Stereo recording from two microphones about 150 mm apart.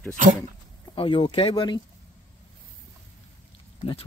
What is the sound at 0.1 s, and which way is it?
Speech, 60° right (ahead or behind).